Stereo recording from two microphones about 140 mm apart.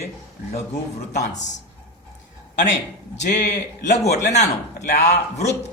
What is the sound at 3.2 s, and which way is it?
A man's voice, 60° left (ahead or behind).